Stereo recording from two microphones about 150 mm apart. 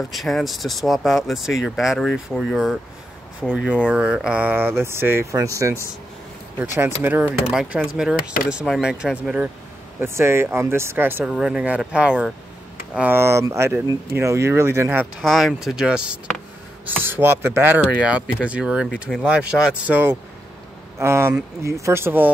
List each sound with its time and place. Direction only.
0.1 s speech: centre (ahead or behind)
8.2 s speech: 75° left (ahead or behind)
8.5 s speech: 5° right (ahead or behind)
15.2 s speech: centre (ahead or behind)
19.5 s speech: 10° right (ahead or behind)